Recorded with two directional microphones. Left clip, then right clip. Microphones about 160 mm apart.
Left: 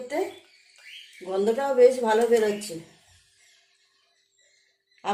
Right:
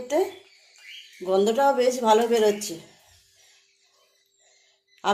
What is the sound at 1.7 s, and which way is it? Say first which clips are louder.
Speech: left 1 dB; 45° right (ahead or behind).